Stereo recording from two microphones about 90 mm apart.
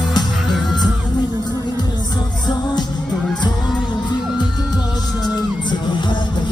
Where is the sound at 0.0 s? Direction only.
50° left (ahead or behind).